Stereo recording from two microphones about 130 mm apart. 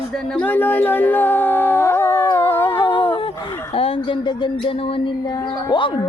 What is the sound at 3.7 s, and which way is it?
Speech, 45° left (ahead or behind).